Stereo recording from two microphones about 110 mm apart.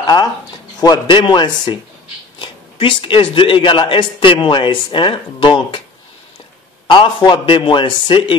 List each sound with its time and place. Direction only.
0.0 s a man's voice: 35° left (ahead or behind)
6.9 s a man's voice: 50° left (ahead or behind)